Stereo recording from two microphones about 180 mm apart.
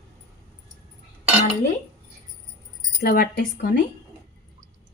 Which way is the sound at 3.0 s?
60° left (ahead or behind).